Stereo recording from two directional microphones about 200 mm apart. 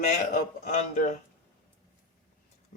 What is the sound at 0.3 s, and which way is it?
Speech, 40° left (ahead or behind).